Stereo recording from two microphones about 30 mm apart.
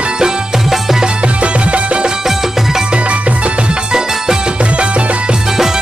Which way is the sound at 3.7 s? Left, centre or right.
Right.